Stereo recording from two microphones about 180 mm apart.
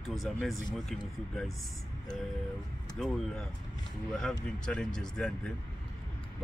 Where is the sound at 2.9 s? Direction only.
5° left (ahead or behind).